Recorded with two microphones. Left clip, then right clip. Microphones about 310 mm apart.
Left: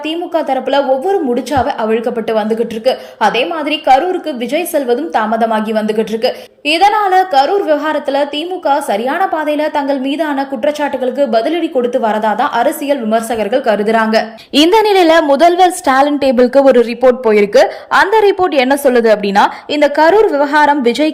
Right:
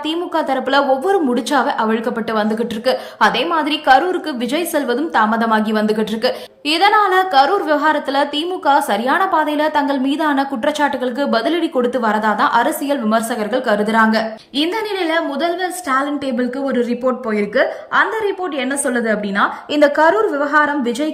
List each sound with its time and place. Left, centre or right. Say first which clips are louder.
0.3 s a woman's voice: left 3 dB; centre